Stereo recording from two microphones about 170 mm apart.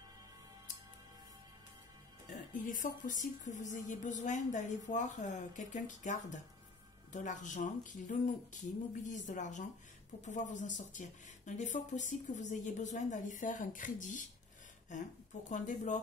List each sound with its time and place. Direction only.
2.2 s speech: 50° left (ahead or behind)
15.5 s speech: 45° left (ahead or behind)